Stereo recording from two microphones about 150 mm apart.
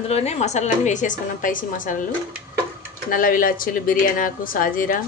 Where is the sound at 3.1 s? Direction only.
70° left (ahead or behind).